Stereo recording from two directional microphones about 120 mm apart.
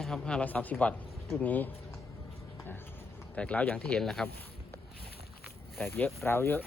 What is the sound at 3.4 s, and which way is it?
Speech, 10° left (ahead or behind).